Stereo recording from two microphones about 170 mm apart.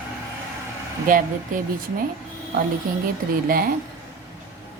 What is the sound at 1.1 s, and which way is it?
Speech, 50° right (ahead or behind).